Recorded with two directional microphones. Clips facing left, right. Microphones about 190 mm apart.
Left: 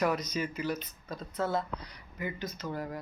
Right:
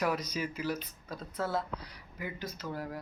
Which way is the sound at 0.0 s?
5° right (ahead or behind).